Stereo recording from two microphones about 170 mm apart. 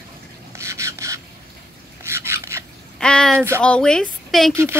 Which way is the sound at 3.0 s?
5° left (ahead or behind).